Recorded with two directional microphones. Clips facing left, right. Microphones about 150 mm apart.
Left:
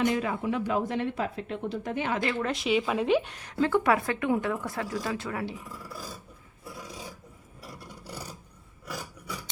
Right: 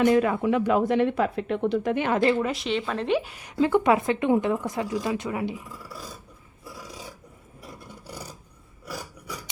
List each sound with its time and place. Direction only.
0.0 s speech: 60° right (ahead or behind)
2.4 s a woman's voice: centre (ahead or behind); by 5.5 s 20° right (ahead or behind)
6.8 s filing: centre (ahead or behind)